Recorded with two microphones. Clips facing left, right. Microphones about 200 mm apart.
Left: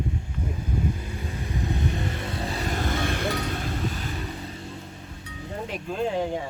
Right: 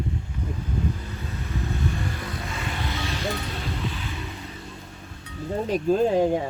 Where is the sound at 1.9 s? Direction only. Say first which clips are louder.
Left 1 dB; 20° left (ahead or behind); by 4.3 s 45° left (ahead or behind).